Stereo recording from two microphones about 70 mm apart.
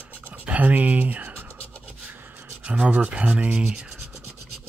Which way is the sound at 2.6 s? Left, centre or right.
Centre.